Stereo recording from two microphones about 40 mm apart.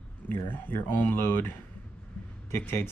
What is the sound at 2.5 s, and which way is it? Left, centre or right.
Speech, left.